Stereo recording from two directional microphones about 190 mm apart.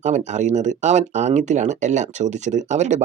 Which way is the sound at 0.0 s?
40° right (ahead or behind).